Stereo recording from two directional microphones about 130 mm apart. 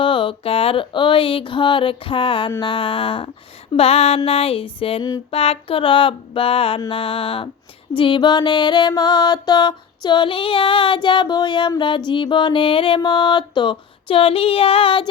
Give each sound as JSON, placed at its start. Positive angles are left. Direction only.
{"t": 0.0, "sound": "music", "side_deg": 40}
{"t": 2.6, "sound": "a sound", "side_deg": 40}
{"t": 7.9, "sound": "music", "side_deg": 40}